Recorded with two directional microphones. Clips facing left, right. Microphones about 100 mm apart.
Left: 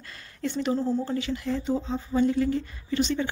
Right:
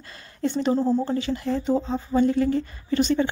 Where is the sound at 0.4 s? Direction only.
35° right (ahead or behind).